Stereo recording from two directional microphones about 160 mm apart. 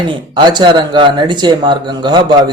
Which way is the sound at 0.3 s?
30° right (ahead or behind).